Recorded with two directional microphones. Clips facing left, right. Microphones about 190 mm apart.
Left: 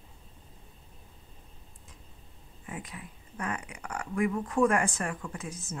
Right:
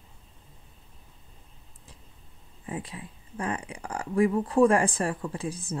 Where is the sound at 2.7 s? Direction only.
30° right (ahead or behind).